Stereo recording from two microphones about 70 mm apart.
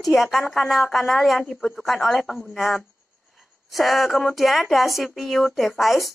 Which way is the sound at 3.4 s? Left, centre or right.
Centre.